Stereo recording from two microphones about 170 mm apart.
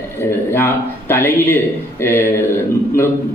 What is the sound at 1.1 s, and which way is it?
A man's voice, 15° left (ahead or behind).